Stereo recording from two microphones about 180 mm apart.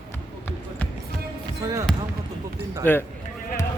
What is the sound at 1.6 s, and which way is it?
Speech, 15° right (ahead or behind).